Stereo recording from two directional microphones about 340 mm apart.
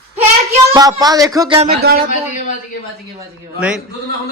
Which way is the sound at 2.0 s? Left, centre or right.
Left.